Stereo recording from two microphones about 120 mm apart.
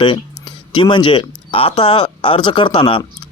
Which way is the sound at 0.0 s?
40° left (ahead or behind).